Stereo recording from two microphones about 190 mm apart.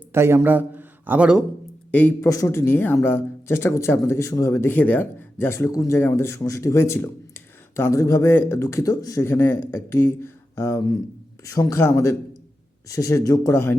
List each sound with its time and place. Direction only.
0.1 s a man's voice: 15° right (ahead or behind)
1.9 s speech: 10° left (ahead or behind)